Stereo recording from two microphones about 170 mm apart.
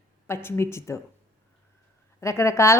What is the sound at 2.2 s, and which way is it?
Speech, 15° left (ahead or behind).